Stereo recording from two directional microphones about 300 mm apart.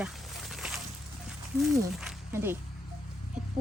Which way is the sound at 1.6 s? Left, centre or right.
Centre.